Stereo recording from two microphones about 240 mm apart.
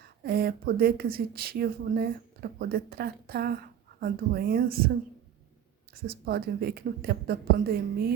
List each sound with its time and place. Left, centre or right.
0.2 s speech: right
5.9 s speech: right